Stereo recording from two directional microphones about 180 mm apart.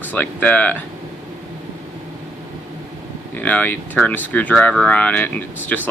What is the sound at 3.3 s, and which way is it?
Speech, 10° left (ahead or behind).